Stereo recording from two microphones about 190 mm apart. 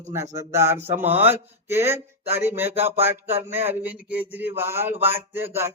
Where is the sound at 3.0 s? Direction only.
10° right (ahead or behind).